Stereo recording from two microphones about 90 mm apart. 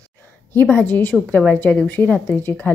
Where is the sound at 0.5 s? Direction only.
20° left (ahead or behind).